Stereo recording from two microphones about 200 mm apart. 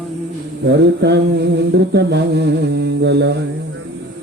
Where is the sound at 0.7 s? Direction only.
55° right (ahead or behind).